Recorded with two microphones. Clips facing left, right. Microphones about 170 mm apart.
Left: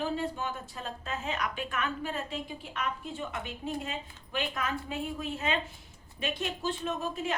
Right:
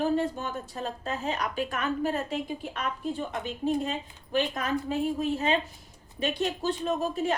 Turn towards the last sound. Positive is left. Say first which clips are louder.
# right 5 dB
turn(degrees=-40)  # may be behind; listen again after turning